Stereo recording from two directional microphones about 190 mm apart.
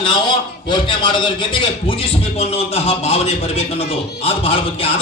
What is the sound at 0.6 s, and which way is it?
A man's voice, 25° left (ahead or behind).